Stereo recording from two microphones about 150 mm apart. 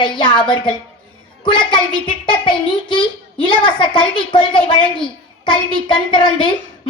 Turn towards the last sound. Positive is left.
turn(degrees=35)  # may be behind; listen again after turning